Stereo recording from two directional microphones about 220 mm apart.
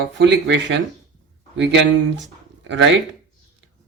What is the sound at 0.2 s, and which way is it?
Speech, 50° right (ahead or behind).